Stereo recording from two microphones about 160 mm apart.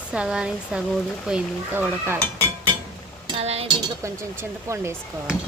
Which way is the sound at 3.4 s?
40° right (ahead or behind).